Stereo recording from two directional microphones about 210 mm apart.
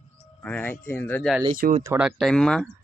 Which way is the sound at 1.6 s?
35° right (ahead or behind).